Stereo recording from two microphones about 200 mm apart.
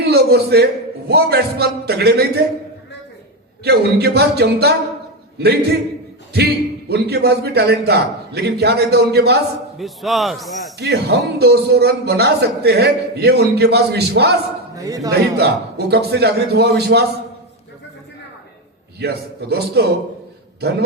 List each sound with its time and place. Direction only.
0.1 s a man's voice: 55° right (ahead or behind)
3.6 s a man's voice: 55° right (ahead or behind)
9.7 s a man's voice: centre (ahead or behind)
10.8 s a man's voice: 55° right (ahead or behind)
14.8 s a man's voice: 15° right (ahead or behind)
15.1 s a man's voice: 55° right (ahead or behind)
18.9 s a man's voice: 55° right (ahead or behind)